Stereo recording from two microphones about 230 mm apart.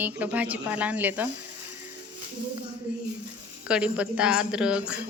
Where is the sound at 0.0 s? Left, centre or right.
Centre.